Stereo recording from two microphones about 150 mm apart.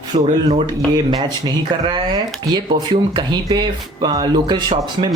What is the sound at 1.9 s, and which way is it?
Speech, 30° right (ahead or behind).